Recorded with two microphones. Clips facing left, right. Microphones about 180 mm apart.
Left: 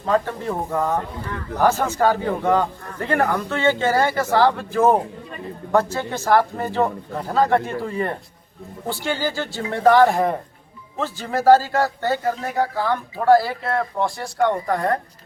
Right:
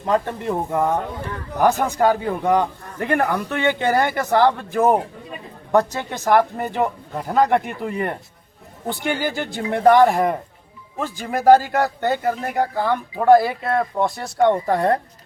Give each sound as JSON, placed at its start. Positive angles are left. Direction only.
{"t": 0.0, "sound": "a man's voice", "side_deg": -20}